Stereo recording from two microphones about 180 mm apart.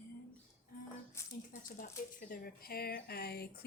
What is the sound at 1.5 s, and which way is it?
A woman's voice, 50° left (ahead or behind).